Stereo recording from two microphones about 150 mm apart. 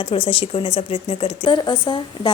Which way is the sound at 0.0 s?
40° left (ahead or behind).